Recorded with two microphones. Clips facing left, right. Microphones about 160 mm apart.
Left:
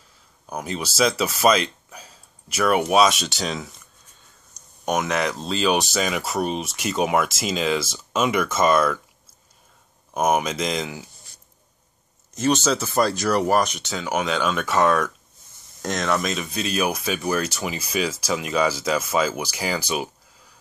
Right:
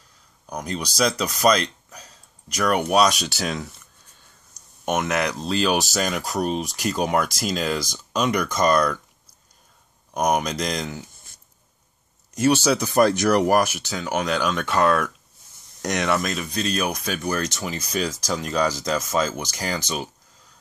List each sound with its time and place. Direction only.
0.5 s speech: 5° left (ahead or behind)
4.8 s speech: centre (ahead or behind)
10.1 s speech: 5° left (ahead or behind)
12.4 s speech: 10° right (ahead or behind)
15.8 s speech: 15° right (ahead or behind)
16.2 s speech: centre (ahead or behind)